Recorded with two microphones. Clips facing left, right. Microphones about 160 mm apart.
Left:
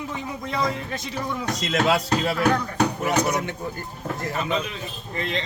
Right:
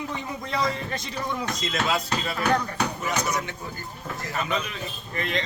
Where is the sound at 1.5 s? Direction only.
75° left (ahead or behind).